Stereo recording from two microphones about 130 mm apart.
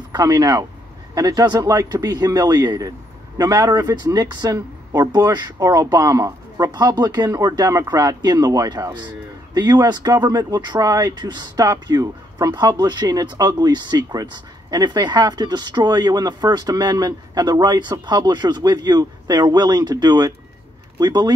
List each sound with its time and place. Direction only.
0.1 s speech: 30° right (ahead or behind)